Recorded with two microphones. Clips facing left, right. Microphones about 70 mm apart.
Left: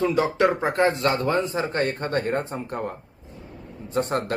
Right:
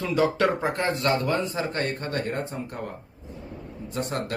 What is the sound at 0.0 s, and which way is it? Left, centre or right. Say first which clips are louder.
A man's voice: left 2 dB; left.